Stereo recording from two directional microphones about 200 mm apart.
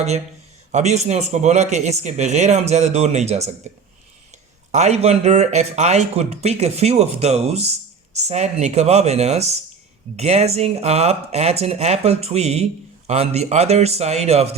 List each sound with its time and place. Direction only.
0.7 s speech: 35° right (ahead or behind)
4.7 s speech: 35° right (ahead or behind)